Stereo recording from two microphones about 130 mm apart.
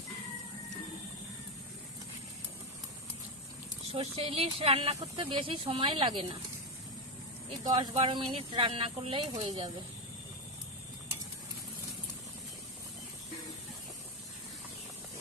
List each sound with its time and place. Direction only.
3.9 s speech: 50° right (ahead or behind)
7.6 s speech: 30° right (ahead or behind)
7.9 s speech: 45° right (ahead or behind)